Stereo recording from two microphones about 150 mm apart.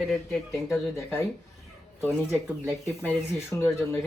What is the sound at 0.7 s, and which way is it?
Speech, 15° left (ahead or behind).